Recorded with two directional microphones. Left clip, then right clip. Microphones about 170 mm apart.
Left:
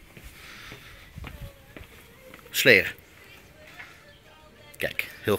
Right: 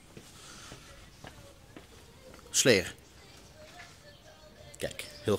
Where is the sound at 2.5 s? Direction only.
15° right (ahead or behind).